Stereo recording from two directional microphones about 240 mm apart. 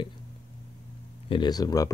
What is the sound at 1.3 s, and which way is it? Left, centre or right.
Speech, centre.